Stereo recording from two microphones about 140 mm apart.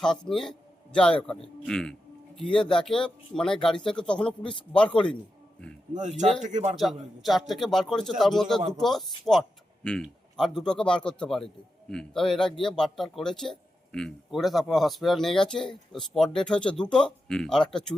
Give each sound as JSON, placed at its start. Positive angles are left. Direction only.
{"t": 0.0, "sound": "a man's voice", "side_deg": 5}
{"t": 1.6, "sound": "a man's voice", "side_deg": 5}
{"t": 5.9, "sound": "speech", "side_deg": -60}
{"t": 6.7, "sound": "a man's voice", "side_deg": 0}